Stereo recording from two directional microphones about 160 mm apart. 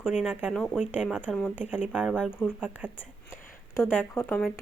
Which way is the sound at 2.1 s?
5° left (ahead or behind).